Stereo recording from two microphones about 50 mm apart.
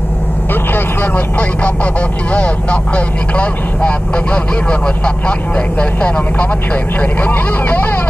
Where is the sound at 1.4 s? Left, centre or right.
Left.